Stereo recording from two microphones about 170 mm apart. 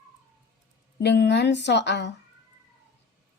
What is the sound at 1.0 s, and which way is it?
A woman's voice, 85° left.